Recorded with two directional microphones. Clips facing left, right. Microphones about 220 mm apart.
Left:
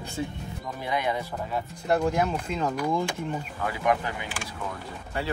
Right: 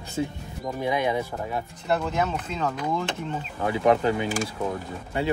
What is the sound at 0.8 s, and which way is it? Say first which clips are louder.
Speech: right 3 dB; 20° right (ahead or behind).